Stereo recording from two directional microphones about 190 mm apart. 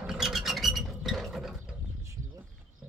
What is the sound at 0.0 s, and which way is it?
Rodents, centre (ahead or behind).